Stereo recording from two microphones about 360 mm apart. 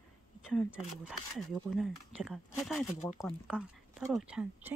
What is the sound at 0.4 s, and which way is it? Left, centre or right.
Speech, centre.